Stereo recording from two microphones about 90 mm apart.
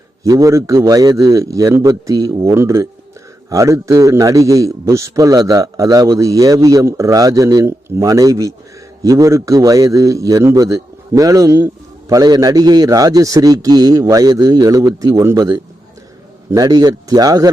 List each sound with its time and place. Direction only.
0.2 s a man's voice: 35° right (ahead or behind)
15.4 s a man's voice: 45° right (ahead or behind)